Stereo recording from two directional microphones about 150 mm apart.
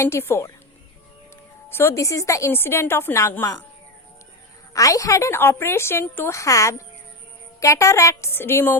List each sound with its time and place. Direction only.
0.0 s a woman's voice: 15° left (ahead or behind)
1.7 s a woman's voice: 15° left (ahead or behind)
4.7 s a woman's voice: 20° left (ahead or behind)